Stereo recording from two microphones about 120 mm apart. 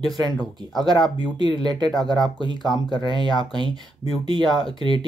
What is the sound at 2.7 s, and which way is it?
Speech, 40° left (ahead or behind).